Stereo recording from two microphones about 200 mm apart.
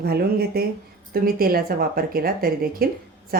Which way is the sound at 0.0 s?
50° right (ahead or behind).